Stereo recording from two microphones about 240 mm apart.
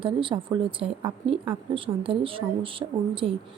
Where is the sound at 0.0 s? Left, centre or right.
Right.